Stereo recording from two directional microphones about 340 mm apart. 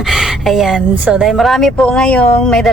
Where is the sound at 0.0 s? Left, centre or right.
Centre.